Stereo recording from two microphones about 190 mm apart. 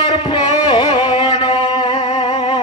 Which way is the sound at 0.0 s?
25° left (ahead or behind).